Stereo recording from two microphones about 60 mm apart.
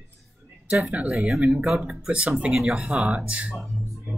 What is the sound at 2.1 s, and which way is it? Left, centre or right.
Speech, centre.